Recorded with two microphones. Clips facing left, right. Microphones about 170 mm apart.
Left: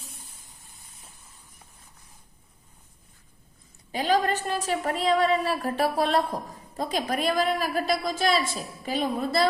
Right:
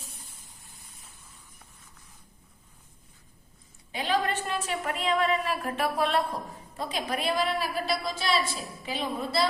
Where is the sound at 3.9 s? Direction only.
40° left (ahead or behind).